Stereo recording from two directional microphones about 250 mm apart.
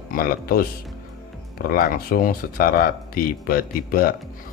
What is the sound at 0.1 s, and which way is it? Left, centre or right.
Speech, left.